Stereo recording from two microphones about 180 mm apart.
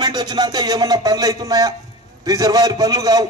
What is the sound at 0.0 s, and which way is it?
A man's voice, 20° right (ahead or behind).